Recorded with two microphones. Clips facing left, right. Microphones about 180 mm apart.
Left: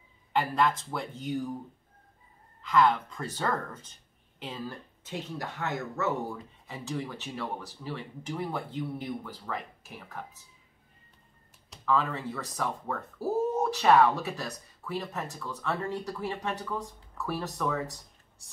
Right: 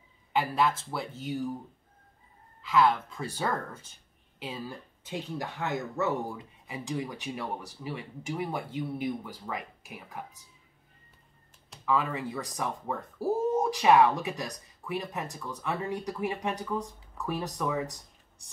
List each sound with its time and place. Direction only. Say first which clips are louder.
0.3 s speech: even; 5° right (ahead or behind)
2.6 s speech: even; 5° right (ahead or behind)
11.8 s speech: even; 10° right (ahead or behind)